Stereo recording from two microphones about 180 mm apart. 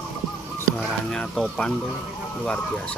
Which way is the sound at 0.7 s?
5° left (ahead or behind).